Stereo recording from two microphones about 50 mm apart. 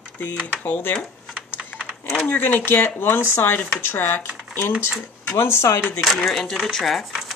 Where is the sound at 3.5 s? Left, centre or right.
Left.